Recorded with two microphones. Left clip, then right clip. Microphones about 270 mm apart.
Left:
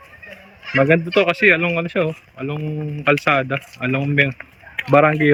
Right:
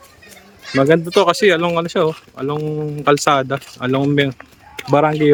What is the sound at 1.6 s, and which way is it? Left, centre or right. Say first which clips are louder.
Speech: right 3 dB; right.